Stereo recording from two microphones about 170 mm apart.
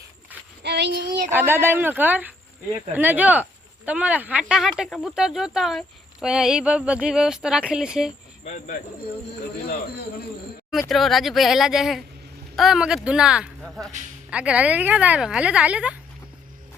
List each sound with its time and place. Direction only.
0.6 s speech: 80° right
1.3 s speech: 15° right (ahead or behind)
8.5 s speech: 50° left (ahead or behind)
9.6 s a man's voice: 60° left (ahead or behind)
10.7 s speech: centre (ahead or behind)